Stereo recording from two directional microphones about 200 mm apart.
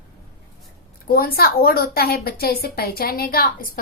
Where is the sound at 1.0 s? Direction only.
50° left (ahead or behind).